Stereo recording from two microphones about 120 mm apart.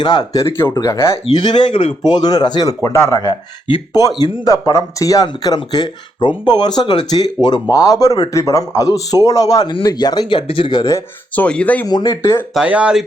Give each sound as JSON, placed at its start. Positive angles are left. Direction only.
{"t": 0.0, "sound": "speech", "side_deg": 35}
{"t": 0.4, "sound": "speech", "side_deg": 20}
{"t": 1.6, "sound": "speech", "side_deg": 45}
{"t": 2.0, "sound": "speech", "side_deg": 35}
{"t": 11.3, "sound": "speech", "side_deg": 10}
{"t": 11.9, "sound": "speech", "side_deg": 35}
{"t": 12.6, "sound": "speech", "side_deg": -10}